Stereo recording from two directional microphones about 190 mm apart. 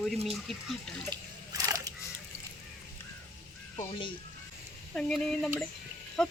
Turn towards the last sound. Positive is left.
turn(degrees=5)  # may be behind; listen again after turning